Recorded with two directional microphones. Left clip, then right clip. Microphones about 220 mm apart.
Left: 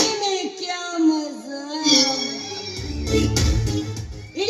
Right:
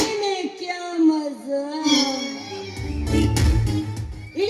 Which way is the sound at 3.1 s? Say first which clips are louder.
Left 2 dB; 45° left (ahead or behind).